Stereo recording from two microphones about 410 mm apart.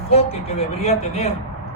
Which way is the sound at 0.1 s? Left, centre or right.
Centre.